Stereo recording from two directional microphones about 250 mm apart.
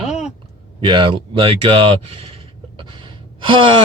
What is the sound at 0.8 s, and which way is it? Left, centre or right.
Speech, centre.